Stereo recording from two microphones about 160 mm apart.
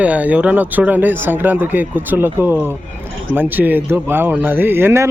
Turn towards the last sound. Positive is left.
turn(degrees=-15)  # may be behind; listen again after turning